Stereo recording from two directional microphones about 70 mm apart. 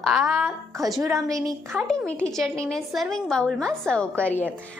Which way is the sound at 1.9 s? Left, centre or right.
Centre.